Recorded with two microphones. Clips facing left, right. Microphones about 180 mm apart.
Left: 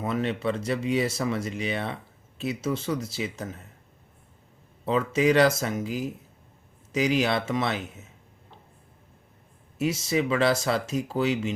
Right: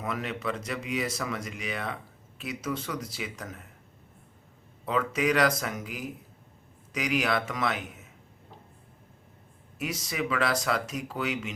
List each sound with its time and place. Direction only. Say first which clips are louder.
0.0 s speech: left 6 dB; 30° left (ahead or behind)
4.9 s speech: left 4 dB; 25° left (ahead or behind)
9.7 s speech: left 7 dB; 25° left (ahead or behind)